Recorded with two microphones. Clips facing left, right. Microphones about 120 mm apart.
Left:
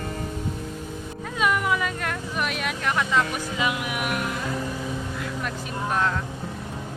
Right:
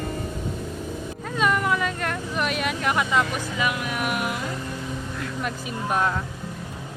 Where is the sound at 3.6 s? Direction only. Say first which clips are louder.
Even; 20° left (ahead or behind).